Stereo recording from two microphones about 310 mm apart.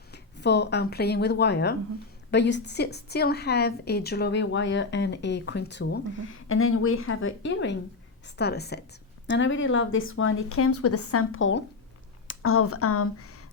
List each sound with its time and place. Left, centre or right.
0.1 s a woman's voice: left